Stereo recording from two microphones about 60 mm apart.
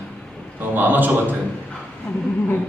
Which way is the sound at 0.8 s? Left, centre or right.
Right.